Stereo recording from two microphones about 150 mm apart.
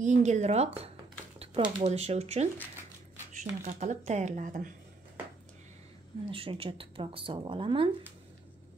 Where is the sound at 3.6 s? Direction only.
55° right (ahead or behind).